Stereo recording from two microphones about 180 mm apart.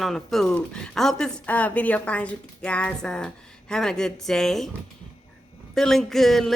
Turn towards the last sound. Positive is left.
turn(degrees=0)  # may be behind; listen again after turning